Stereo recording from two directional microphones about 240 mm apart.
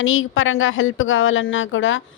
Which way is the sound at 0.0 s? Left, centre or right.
Left.